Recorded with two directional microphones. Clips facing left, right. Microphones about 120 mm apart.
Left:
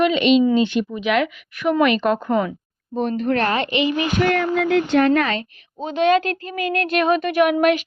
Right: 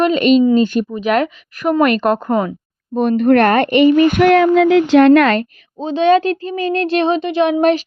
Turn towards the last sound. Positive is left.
turn(degrees=-30)  # may be behind; listen again after turning